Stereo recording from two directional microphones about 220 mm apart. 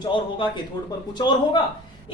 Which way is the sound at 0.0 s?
20° left (ahead or behind).